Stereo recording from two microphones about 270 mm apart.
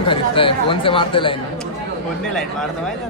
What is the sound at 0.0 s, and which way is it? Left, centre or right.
Speech, centre.